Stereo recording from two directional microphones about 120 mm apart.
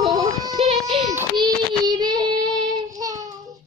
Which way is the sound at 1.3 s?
40° right (ahead or behind).